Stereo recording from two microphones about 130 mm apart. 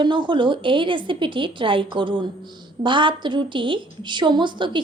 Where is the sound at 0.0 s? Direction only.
35° right (ahead or behind).